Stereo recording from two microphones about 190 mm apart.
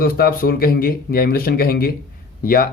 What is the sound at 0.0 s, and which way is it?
Speech, 50° left (ahead or behind).